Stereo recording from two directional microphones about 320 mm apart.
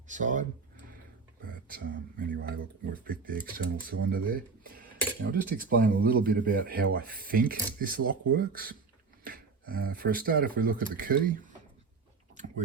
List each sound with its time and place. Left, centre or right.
0.1 s speech: right
1.5 s speech: right
12.3 s a sound: right